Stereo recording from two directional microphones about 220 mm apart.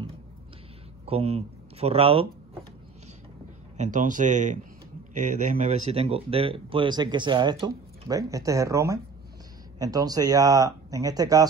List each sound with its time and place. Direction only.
1.0 s speech: 25° right (ahead or behind)
3.7 s speech: 35° right (ahead or behind); by 11.4 s 15° right (ahead or behind)